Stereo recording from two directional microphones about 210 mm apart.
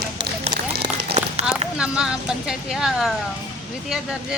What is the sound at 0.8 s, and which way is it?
Run, 30° right (ahead or behind).